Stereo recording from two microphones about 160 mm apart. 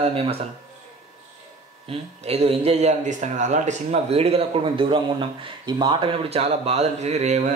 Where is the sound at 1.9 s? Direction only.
40° right (ahead or behind).